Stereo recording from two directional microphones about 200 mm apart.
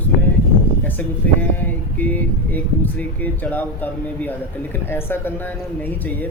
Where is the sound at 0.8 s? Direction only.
10° left (ahead or behind).